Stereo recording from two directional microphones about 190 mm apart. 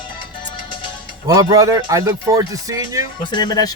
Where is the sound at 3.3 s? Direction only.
20° left (ahead or behind).